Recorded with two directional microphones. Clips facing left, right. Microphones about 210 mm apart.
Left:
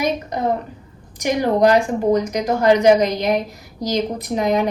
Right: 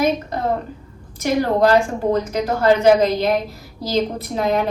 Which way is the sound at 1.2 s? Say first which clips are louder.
Left 1 dB; 15° left (ahead or behind).